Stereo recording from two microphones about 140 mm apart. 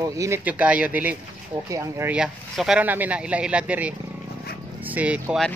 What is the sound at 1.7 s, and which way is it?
Speech, 25° right (ahead or behind).